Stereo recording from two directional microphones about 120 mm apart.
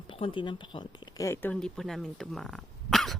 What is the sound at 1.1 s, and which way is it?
Speech, 25° left (ahead or behind).